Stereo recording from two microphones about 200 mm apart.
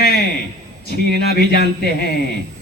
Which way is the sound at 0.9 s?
50° left (ahead or behind).